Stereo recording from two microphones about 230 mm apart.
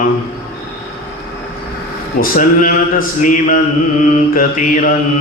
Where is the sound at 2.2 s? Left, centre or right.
Left.